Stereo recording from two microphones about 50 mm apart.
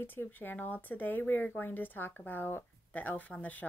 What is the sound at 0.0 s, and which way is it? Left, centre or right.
Speech, left.